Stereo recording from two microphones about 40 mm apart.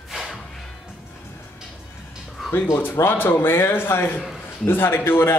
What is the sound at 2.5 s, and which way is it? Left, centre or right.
A man's voice, left.